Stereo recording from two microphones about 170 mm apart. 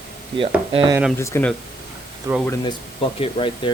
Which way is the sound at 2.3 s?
15° right (ahead or behind).